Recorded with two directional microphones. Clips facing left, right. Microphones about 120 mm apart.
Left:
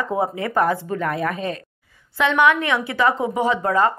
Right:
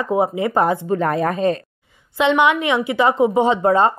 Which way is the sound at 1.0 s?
35° right (ahead or behind).